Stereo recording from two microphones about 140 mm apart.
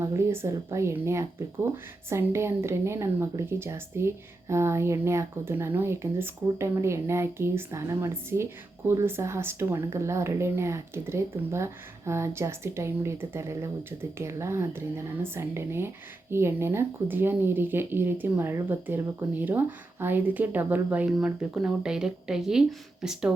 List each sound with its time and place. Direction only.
0.0 s speech: 20° right (ahead or behind)